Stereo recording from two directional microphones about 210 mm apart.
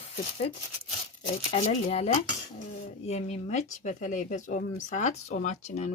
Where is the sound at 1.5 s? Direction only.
30° left (ahead or behind).